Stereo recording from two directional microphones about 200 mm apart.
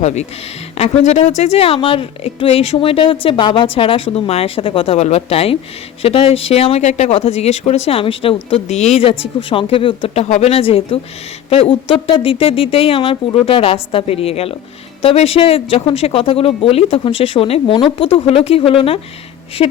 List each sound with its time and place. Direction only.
0.0 s a woman's voice: 35° left (ahead or behind)